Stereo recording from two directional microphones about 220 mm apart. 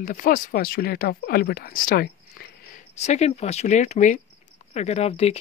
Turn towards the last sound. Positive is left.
turn(degrees=30)  # may be behind; listen again after turning